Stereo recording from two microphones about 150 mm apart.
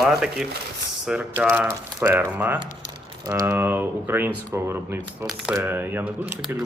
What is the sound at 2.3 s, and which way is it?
Speech, 10° right (ahead or behind).